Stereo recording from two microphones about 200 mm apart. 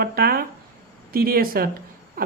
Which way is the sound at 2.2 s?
45° right (ahead or behind).